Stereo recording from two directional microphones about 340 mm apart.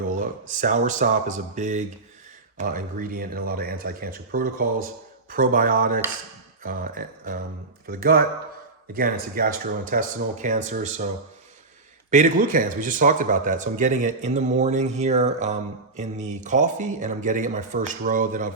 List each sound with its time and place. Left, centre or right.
0.1 s speech: right
6.6 s music: right
7.9 s speech: right
12.1 s speech: right